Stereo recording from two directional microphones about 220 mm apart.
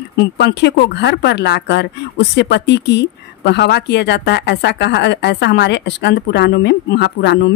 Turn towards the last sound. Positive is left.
turn(degrees=50)  # may be behind; listen again after turning